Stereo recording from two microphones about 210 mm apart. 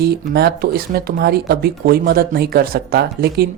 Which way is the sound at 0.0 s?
50° right (ahead or behind).